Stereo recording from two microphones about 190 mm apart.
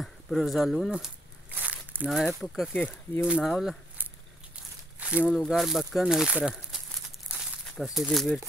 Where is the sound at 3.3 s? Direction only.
5° right (ahead or behind).